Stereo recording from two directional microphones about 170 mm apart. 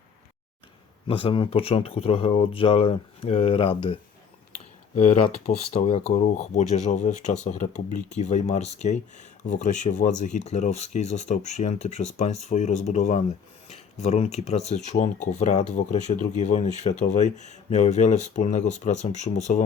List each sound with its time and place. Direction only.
1.0 s speech: 30° left (ahead or behind)
4.9 s speech: 40° left (ahead or behind)